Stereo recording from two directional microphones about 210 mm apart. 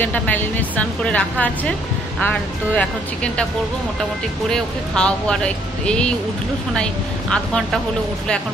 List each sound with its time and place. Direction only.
0.0 s a woman's voice: 10° left (ahead or behind)
4.5 s speech: 5° left (ahead or behind)